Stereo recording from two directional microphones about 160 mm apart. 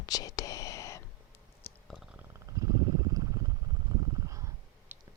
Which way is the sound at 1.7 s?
15° left (ahead or behind).